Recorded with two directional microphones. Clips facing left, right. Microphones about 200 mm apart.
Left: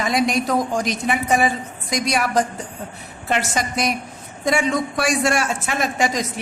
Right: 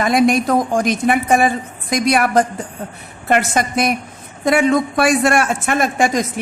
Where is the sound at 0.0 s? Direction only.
55° right (ahead or behind).